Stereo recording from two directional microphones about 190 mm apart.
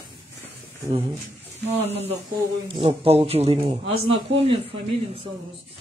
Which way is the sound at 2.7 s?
30° right (ahead or behind).